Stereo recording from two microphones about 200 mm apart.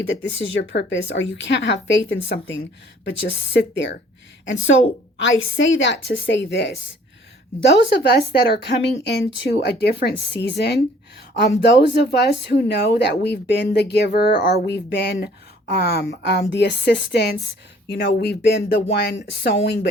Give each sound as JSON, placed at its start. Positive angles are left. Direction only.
{"t": 0.1, "sound": "speech", "side_deg": 70}
{"t": 4.4, "sound": "a woman's voice", "side_deg": 75}